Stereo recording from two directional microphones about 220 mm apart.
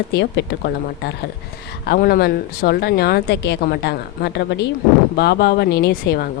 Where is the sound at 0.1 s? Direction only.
50° left (ahead or behind).